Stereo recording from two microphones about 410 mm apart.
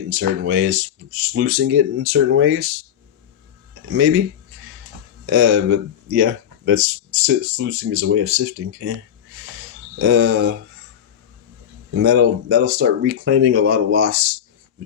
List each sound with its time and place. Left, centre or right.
0.1 s speech: right
5.2 s speech: right
10.0 s speech: right
11.9 s speech: right